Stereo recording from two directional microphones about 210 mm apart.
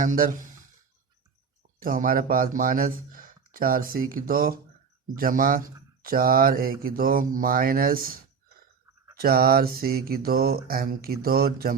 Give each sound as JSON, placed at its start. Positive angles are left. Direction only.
{"t": 0.0, "sound": "a man's voice", "side_deg": -40}
{"t": 1.8, "sound": "a man's voice", "side_deg": -40}
{"t": 9.1, "sound": "speech", "side_deg": -45}